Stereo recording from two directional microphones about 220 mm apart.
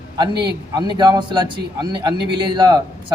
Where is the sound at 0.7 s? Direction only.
20° right (ahead or behind).